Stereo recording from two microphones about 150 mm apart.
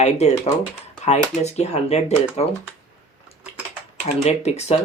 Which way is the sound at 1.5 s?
45° left (ahead or behind).